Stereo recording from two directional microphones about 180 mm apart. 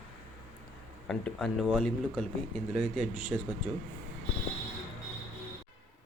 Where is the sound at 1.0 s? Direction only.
Centre (ahead or behind).